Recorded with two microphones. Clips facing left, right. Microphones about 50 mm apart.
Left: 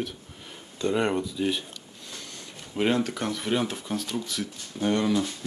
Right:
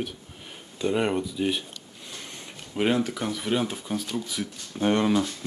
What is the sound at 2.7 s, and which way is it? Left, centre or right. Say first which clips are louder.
Speech: right 1 dB; centre.